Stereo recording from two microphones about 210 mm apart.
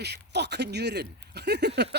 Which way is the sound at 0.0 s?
50° right (ahead or behind).